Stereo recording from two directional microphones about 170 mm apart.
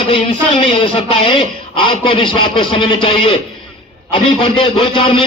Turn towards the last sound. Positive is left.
turn(degrees=30)  # may be behind; listen again after turning